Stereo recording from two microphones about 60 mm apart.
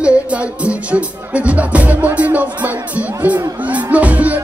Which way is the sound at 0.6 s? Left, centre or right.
Right.